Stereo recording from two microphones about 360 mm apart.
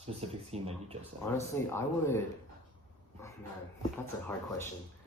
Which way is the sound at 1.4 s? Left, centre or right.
Centre.